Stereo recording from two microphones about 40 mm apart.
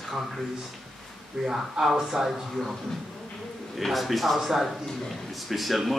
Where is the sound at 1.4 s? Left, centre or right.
Centre.